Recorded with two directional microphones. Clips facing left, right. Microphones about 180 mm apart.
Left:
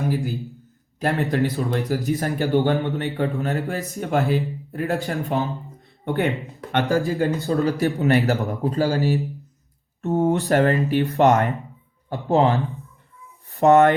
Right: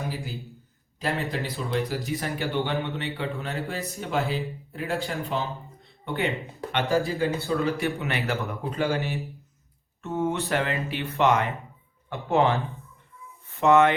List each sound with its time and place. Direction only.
0.9 s a man's voice: 55° left (ahead or behind)
6.9 s a man's voice: 45° left (ahead or behind)